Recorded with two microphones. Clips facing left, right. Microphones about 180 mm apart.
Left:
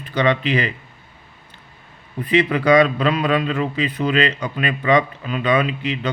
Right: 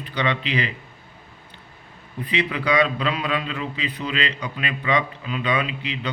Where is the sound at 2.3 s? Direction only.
45° left (ahead or behind).